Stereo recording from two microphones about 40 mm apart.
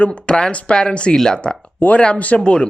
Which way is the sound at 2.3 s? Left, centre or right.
Left.